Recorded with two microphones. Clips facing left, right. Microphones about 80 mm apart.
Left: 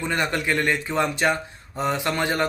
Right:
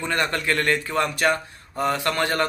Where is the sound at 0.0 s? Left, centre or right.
Centre.